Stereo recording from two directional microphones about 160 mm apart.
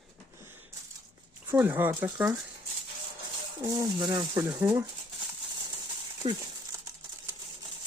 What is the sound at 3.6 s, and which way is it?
Speech, 25° right (ahead or behind).